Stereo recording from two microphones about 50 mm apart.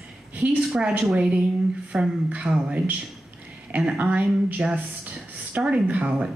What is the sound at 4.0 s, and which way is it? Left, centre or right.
Speech, right.